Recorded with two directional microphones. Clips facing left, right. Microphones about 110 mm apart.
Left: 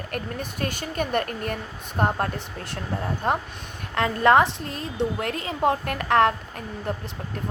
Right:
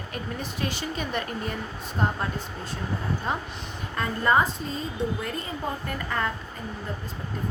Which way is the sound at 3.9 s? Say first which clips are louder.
Left 5 dB; 75° left (ahead or behind).